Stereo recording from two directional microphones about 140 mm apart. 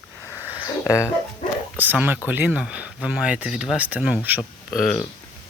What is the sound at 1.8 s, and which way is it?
Speech, 10° right (ahead or behind).